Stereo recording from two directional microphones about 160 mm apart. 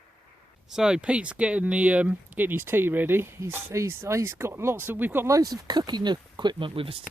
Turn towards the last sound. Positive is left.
turn(degrees=-35)  # may be behind; listen again after turning